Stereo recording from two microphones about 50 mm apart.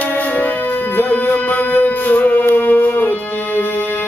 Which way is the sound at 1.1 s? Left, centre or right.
Left.